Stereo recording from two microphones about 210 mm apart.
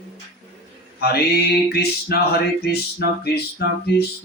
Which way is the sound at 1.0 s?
50° left (ahead or behind).